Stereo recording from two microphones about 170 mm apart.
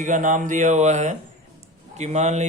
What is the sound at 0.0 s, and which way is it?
Speech, 50° right (ahead or behind).